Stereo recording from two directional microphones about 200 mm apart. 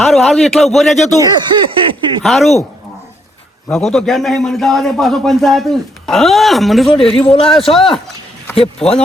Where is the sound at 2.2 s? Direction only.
Centre (ahead or behind).